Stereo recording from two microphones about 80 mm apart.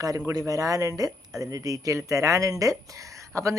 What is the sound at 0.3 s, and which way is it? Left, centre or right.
Speech, right.